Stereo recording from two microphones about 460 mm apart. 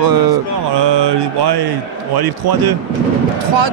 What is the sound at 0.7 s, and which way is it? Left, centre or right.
Speech, right.